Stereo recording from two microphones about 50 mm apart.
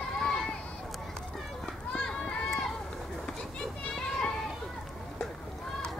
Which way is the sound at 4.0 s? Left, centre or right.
Centre.